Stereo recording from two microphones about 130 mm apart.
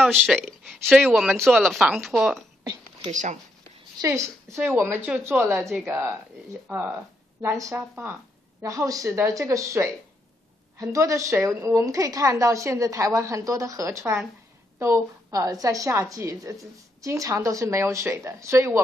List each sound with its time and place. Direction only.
0.0 s speech: centre (ahead or behind)
3.1 s speech: 65° right (ahead or behind)
4.0 s a woman's voice: 25° right (ahead or behind)
5.6 s speech: centre (ahead or behind)
6.7 s a woman's voice: 15° right (ahead or behind)